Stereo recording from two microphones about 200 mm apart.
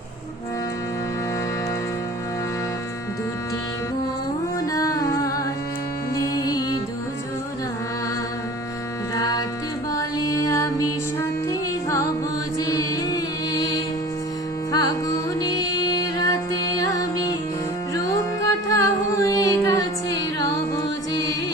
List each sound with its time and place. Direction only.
4.6 s music: 15° left (ahead or behind)
9.9 s music: 15° left (ahead or behind)
12.5 s music: 15° left (ahead or behind)
18.7 s music: 15° left (ahead or behind)